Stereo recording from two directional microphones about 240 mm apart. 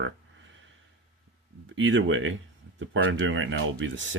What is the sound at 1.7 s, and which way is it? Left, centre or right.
Speech, right.